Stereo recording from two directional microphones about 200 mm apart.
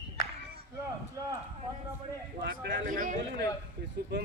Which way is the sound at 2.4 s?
45° right (ahead or behind).